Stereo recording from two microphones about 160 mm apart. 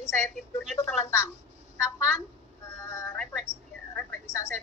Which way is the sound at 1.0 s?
20° left (ahead or behind).